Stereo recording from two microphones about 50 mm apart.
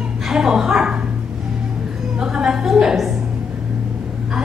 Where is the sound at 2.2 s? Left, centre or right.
Centre.